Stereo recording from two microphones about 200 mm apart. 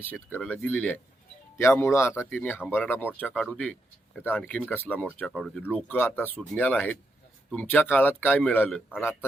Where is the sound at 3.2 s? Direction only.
5° right (ahead or behind).